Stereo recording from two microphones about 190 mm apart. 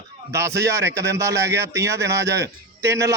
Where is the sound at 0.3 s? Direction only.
15° right (ahead or behind).